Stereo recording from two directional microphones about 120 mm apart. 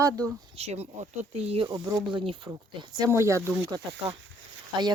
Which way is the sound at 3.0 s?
25° right (ahead or behind).